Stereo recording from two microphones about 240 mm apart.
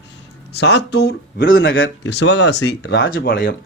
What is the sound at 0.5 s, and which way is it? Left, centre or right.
A man's voice, left.